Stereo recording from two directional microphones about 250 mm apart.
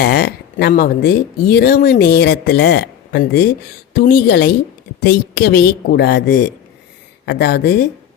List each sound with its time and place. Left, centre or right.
0.0 s speech: left